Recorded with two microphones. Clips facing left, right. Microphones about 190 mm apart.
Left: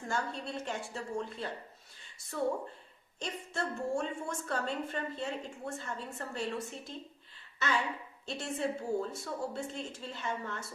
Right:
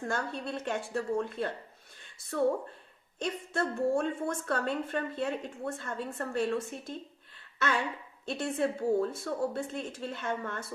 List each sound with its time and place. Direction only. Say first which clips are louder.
0.1 s a woman's voice: even; 60° right (ahead or behind)
3.2 s a woman's voice: right 5 dB; 55° right (ahead or behind)
8.3 s a woman's voice: right 4 dB; 55° right (ahead or behind)